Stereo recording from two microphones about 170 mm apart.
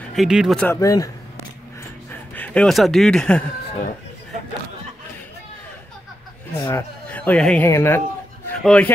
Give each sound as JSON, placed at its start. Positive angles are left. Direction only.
{"t": 0.1, "sound": "speech", "side_deg": 0}
{"t": 0.7, "sound": "a man's voice", "side_deg": 20}
{"t": 2.3, "sound": "speech", "side_deg": 10}
{"t": 6.6, "sound": "speech", "side_deg": 15}
{"t": 8.5, "sound": "a sound", "side_deg": 10}